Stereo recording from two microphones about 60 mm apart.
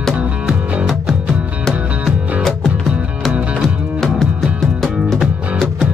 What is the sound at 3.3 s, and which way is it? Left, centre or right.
Music, right.